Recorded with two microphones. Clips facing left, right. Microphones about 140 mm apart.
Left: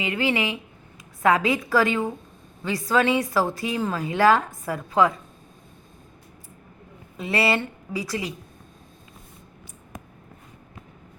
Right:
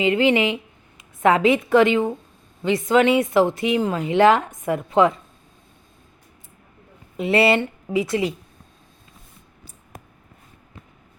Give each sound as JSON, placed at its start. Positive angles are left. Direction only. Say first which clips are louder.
{"t": 0.0, "sound": "a woman's voice", "louder": "right 7 dB", "side_deg": -25}
{"t": 7.2, "sound": "a woman's voice", "louder": "right 6 dB", "side_deg": -25}